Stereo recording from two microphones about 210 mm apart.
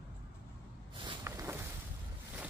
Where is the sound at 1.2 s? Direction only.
15° right (ahead or behind).